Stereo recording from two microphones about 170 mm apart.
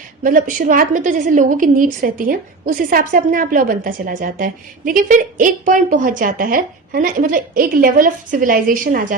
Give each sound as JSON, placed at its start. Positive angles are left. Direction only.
{"t": 0.2, "sound": "a woman's voice", "side_deg": -50}